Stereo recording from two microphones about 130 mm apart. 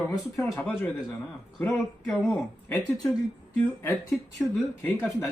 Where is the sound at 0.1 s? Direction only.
25° left (ahead or behind).